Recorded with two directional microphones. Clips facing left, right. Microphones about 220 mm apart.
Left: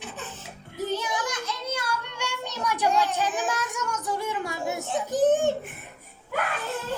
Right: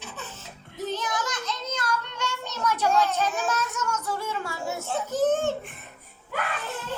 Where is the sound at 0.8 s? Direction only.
10° left (ahead or behind).